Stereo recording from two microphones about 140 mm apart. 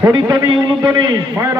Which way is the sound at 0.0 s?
30° right (ahead or behind).